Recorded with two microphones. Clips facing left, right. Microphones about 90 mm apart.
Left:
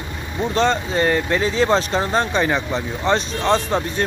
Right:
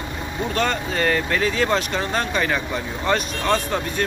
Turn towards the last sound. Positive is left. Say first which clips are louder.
# left 3 dB
turn(degrees=30)  # may be behind; listen again after turning